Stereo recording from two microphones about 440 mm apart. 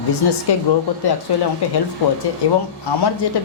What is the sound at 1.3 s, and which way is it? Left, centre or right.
Speech, left.